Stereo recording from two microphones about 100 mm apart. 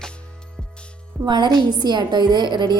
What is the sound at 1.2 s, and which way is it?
A woman's voice, 45° right (ahead or behind).